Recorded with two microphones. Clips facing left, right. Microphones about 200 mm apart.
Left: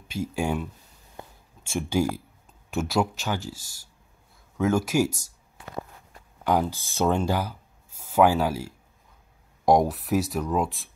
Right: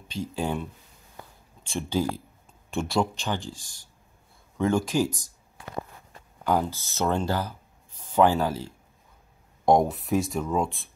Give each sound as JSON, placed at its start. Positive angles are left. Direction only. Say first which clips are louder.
{"t": 0.1, "sound": "speech", "louder": "left 2 dB", "side_deg": 10}
{"t": 1.2, "sound": "a sound", "louder": "left 3 dB", "side_deg": 20}
{"t": 1.6, "sound": "speech", "louder": "left 2 dB", "side_deg": 10}
{"t": 6.4, "sound": "speech", "louder": "left 1 dB", "side_deg": 15}